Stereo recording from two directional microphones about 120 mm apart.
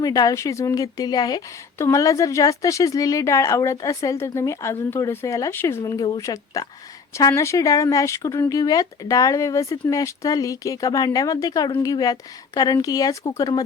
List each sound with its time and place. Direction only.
0.0 s speech: 30° left (ahead or behind)